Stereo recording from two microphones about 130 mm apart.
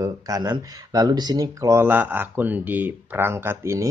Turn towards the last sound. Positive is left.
turn(degrees=-20)  # may be behind; listen again after turning